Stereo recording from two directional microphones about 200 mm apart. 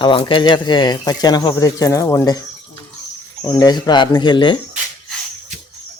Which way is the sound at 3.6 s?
20° left (ahead or behind).